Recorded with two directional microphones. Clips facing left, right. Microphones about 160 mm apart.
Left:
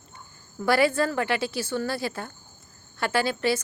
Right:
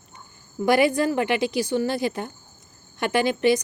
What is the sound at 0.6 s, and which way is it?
A woman's voice, 15° right (ahead or behind).